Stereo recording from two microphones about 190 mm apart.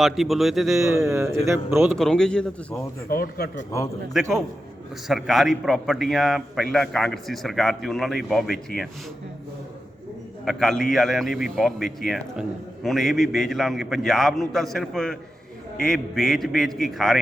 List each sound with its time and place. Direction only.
0.0 s a man's voice: centre (ahead or behind)
0.9 s speech: 15° right (ahead or behind)
1.9 s a man's voice: 5° left (ahead or behind)
3.1 s speech: 50° left (ahead or behind)
4.1 s a man's voice: centre (ahead or behind)
10.4 s a man's voice: centre (ahead or behind)